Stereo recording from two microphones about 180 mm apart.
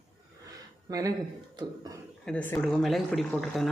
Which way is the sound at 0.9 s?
20° right (ahead or behind).